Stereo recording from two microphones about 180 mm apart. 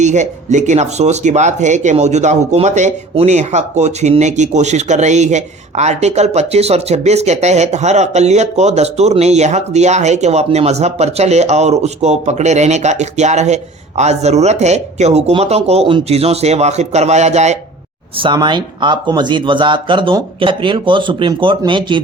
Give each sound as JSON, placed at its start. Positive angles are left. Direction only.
{"t": 0.0, "sound": "speech", "side_deg": -40}
{"t": 18.2, "sound": "speech", "side_deg": -25}